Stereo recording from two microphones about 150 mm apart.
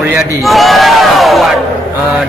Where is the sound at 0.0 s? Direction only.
15° right (ahead or behind).